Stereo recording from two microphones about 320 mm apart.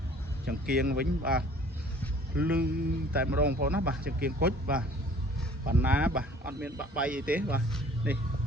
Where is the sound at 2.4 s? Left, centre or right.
Centre.